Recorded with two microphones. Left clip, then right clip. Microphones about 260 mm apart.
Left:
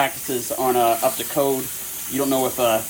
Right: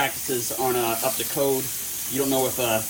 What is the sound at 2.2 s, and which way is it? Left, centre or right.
Speech, left.